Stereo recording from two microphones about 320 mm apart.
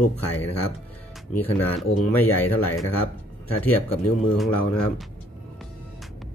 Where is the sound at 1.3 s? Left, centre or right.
Centre.